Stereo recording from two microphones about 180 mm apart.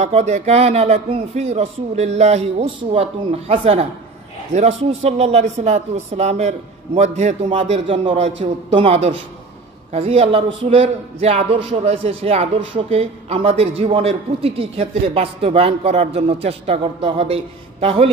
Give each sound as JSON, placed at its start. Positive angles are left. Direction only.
{"t": 0.0, "sound": "a man's voice", "side_deg": -40}